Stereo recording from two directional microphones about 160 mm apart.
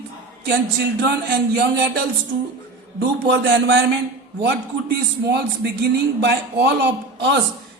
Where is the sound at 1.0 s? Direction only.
90° right.